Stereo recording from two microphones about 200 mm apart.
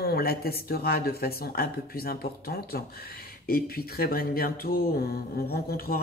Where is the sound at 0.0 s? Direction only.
50° left (ahead or behind).